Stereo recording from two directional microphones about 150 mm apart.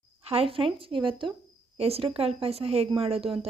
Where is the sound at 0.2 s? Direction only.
40° right (ahead or behind).